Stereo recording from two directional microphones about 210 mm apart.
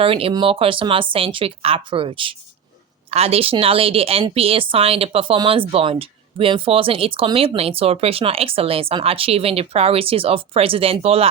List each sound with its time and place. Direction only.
0.0 s a woman's voice: 25° right (ahead or behind)